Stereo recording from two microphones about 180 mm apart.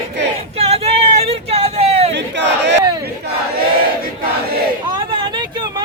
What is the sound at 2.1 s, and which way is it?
Crowd, 75° right (ahead or behind).